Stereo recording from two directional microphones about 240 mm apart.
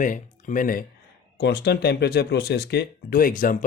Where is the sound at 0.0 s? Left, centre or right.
Left.